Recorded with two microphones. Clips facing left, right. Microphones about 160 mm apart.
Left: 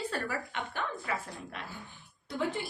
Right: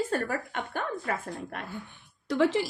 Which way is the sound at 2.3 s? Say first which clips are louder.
Right 9 dB; 80° right.